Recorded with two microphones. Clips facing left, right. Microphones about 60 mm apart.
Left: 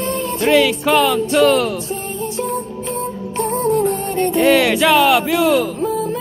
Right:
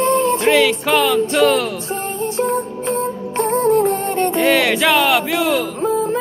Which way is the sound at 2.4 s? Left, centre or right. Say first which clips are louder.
Right 5 dB; right.